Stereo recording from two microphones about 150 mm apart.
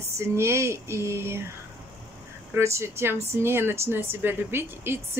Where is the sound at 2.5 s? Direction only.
20° right (ahead or behind).